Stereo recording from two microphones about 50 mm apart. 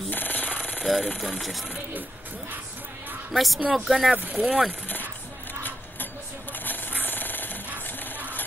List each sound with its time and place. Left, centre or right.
0.1 s jackhammer: left
0.7 s speech: centre
3.3 s speech: centre
4.1 s speech: right
4.8 s a sound: left
7.1 s jackhammer: left